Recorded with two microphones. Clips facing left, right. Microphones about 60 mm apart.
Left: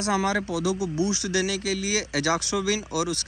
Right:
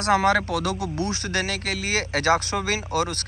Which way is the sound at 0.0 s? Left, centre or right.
Right.